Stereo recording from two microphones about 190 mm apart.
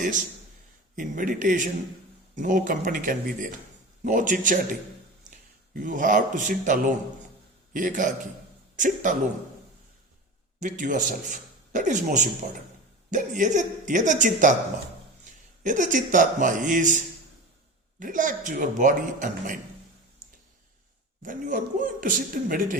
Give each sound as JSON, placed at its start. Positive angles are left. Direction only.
{"t": 0.9, "sound": "speech", "side_deg": -45}
{"t": 5.7, "sound": "speech", "side_deg": -45}
{"t": 10.6, "sound": "a man's voice", "side_deg": -40}
{"t": 15.6, "sound": "speech", "side_deg": -40}
{"t": 18.0, "sound": "speech", "side_deg": -45}
{"t": 21.2, "sound": "speech", "side_deg": -45}